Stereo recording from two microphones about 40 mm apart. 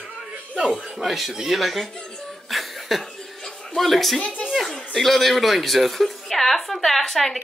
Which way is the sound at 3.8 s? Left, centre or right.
Centre.